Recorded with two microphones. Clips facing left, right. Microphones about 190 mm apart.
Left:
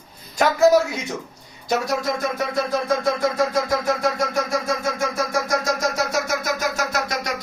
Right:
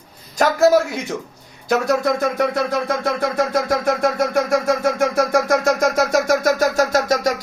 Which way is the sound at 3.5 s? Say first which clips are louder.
Right 3 dB; 60° right (ahead or behind).